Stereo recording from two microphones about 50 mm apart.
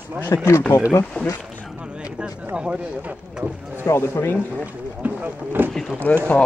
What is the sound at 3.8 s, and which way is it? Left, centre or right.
Speech, left.